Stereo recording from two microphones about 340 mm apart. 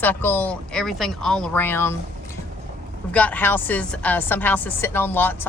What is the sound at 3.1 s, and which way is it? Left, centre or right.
A woman's voice, centre.